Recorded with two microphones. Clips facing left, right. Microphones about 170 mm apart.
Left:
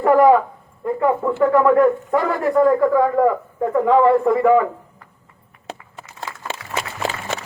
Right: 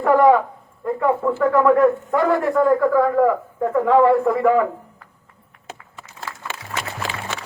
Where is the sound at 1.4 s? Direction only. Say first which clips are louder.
Left 1 dB; centre (ahead or behind).